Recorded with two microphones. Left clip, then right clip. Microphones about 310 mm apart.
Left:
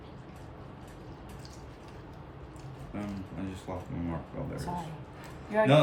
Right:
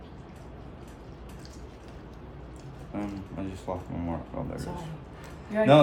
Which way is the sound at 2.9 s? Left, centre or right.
Centre.